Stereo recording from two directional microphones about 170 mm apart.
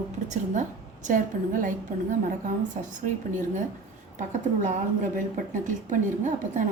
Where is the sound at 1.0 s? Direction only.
50° right (ahead or behind).